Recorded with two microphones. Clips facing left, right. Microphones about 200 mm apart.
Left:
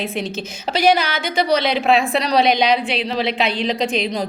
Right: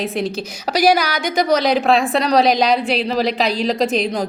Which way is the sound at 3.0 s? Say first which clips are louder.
Right 3 dB; 40° right (ahead or behind).